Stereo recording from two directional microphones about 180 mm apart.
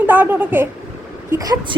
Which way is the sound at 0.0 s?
10° right (ahead or behind).